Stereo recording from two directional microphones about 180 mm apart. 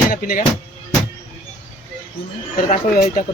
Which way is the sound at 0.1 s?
50° left (ahead or behind).